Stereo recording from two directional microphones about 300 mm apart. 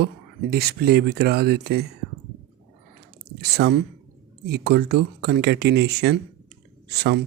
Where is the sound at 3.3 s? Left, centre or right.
Right.